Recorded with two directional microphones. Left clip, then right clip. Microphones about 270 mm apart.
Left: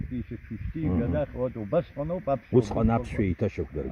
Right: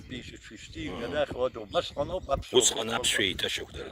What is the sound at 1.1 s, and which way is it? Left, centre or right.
Speech, right.